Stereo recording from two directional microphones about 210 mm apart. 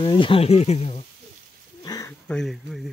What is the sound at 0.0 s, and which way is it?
Speech, 25° left (ahead or behind).